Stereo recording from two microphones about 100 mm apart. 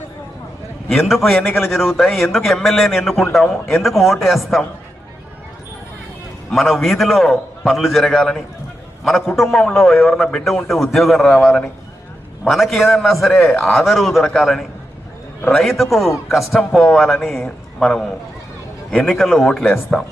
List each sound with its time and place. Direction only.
0.9 s a man's voice: centre (ahead or behind)
6.5 s a man's voice: centre (ahead or behind)
12.5 s a man's voice: centre (ahead or behind)
13.4 s a man's voice: 15° left (ahead or behind)
13.7 s a man's voice: centre (ahead or behind)